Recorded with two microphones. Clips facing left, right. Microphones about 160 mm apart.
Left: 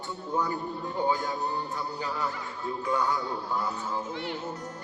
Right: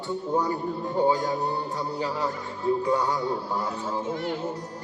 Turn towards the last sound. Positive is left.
turn(degrees=-45)  # may be behind; listen again after turning